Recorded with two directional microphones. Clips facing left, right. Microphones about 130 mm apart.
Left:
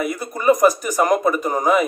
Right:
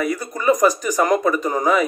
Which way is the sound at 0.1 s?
15° left (ahead or behind).